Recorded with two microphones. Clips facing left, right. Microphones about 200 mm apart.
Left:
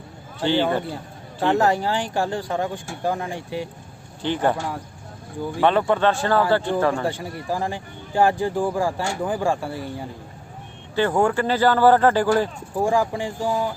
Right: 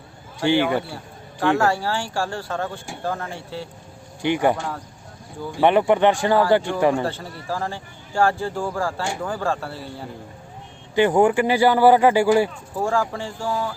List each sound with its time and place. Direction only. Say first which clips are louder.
0.3 s speech: right 1 dB; 15° right (ahead or behind)
1.4 s speech: even; 20° left (ahead or behind)
4.2 s speech: right 2 dB; 15° right (ahead or behind)
5.5 s speech: right 3 dB; 15° right (ahead or behind)
7.0 s speech: left 1 dB; 15° left (ahead or behind)
10.9 s speech: right 3 dB; 15° right (ahead or behind)
12.7 s speech: left 3 dB; 15° left (ahead or behind)